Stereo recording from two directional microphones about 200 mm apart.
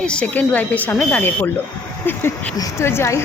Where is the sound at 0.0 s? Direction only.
5° left (ahead or behind).